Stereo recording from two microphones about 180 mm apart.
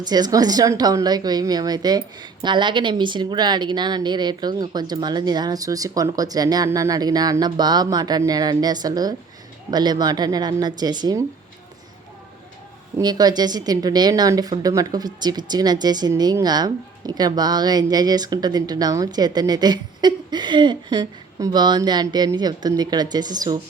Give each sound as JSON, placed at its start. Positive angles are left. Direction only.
{"t": 0.0, "sound": "speech", "side_deg": -20}
{"t": 13.0, "sound": "speech", "side_deg": -20}